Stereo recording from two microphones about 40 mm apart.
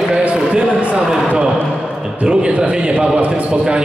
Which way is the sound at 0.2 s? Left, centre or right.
Right.